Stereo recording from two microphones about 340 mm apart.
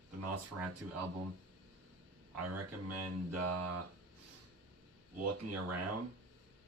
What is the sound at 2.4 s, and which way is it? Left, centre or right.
Speech, right.